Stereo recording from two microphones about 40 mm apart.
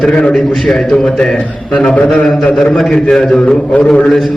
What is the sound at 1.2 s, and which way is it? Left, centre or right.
Speech, left.